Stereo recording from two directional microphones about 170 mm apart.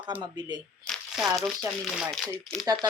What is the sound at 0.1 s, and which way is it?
Speech, 10° right (ahead or behind).